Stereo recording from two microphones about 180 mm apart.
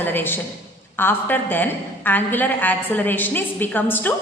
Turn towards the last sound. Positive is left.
turn(degrees=10)  # may be behind; listen again after turning